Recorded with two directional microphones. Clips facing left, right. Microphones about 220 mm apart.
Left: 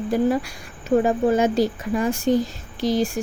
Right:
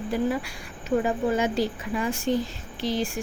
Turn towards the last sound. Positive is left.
turn(degrees=40)  # may be behind; listen again after turning